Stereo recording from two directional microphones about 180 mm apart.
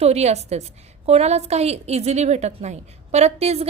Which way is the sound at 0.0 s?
35° right (ahead or behind).